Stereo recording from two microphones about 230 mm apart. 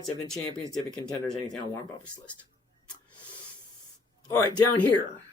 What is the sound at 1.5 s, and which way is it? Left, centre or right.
Speech, centre.